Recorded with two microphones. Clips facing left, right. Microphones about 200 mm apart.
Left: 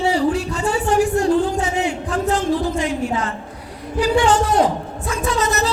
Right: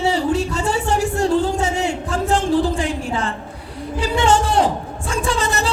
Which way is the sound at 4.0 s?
25° right (ahead or behind).